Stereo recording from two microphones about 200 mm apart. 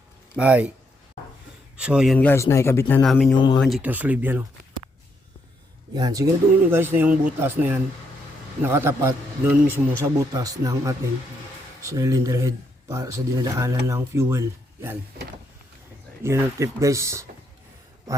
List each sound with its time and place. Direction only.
0.3 s speech: 5° right (ahead or behind)
1.7 s a man's voice: 5° right (ahead or behind)
2.1 s speech: 10° left (ahead or behind)
3.3 s speech: 20° left (ahead or behind)
3.6 s speech: 5° right (ahead or behind)
5.9 s speech: 20° right (ahead or behind)
16.2 s speech: 15° right (ahead or behind)